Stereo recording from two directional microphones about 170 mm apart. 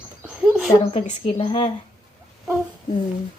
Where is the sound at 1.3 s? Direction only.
35° left (ahead or behind).